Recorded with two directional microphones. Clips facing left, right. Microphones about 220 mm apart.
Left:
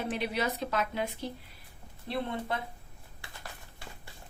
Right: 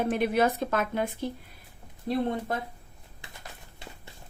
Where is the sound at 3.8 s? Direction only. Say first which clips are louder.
Right 3 dB; 20° right (ahead or behind).